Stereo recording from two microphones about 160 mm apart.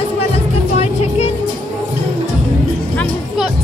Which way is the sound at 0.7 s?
40° left (ahead or behind).